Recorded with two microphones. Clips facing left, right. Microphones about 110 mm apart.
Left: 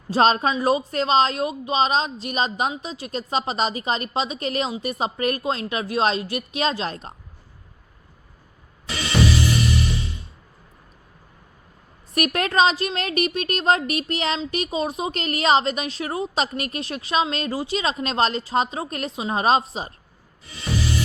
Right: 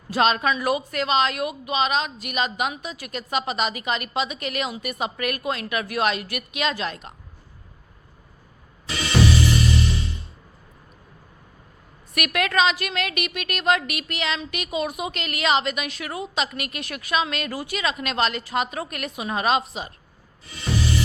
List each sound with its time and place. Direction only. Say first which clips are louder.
0.1 s speech: left 2 dB; 35° left (ahead or behind)
12.1 s speech: left 2 dB; 35° left (ahead or behind)